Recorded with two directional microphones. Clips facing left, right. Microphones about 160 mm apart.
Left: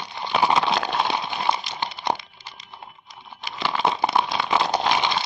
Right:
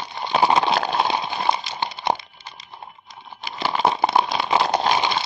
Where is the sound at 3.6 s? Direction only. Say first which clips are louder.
Right 2 dB; 35° right (ahead or behind).